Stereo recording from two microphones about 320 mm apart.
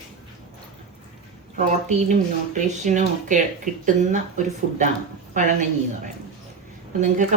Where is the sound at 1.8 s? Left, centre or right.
Right.